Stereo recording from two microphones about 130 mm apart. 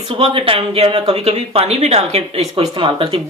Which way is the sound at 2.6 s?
40° right (ahead or behind).